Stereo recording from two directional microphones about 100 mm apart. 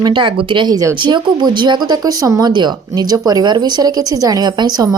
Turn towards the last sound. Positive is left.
turn(degrees=-40)  # may be behind; listen again after turning